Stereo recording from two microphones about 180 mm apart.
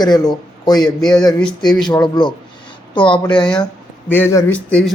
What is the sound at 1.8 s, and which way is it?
Speech, 25° left (ahead or behind).